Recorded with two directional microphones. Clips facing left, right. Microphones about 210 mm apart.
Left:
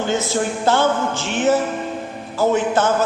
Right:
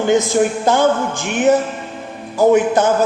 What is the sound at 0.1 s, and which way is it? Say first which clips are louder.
A man's voice: right 10 dB; 15° right (ahead or behind).